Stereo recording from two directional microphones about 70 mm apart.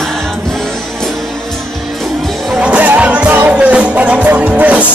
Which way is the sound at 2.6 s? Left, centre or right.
Centre.